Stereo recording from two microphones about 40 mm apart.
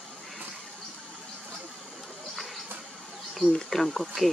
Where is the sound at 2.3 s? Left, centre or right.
Centre.